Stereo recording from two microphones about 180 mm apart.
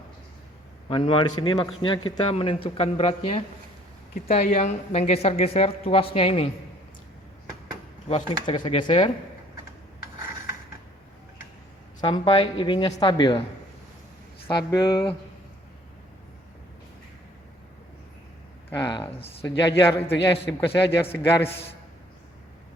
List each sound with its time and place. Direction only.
0.9 s a man's voice: 30° left (ahead or behind)
8.0 s a man's voice: 35° left (ahead or behind)
11.9 s a man's voice: 25° left (ahead or behind)
14.4 s a man's voice: 20° left (ahead or behind)
18.8 s a man's voice: 25° left (ahead or behind)